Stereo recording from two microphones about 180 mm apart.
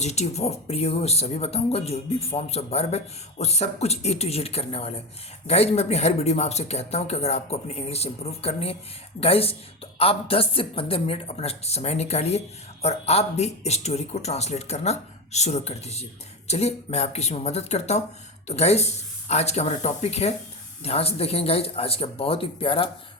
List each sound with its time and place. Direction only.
0.0 s speech: 40° left (ahead or behind)